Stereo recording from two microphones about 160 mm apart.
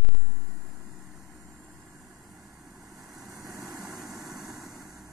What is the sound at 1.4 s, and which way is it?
Vehicle, 20° right (ahead or behind).